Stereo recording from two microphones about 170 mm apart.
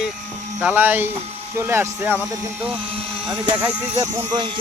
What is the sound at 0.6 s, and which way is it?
Speech, 10° right (ahead or behind).